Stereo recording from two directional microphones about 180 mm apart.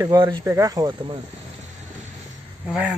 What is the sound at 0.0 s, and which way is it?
Speech, 25° right (ahead or behind).